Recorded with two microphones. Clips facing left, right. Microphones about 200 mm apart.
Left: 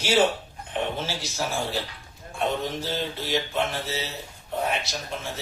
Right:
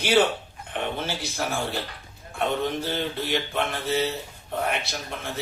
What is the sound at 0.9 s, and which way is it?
Speech, 60° right (ahead or behind).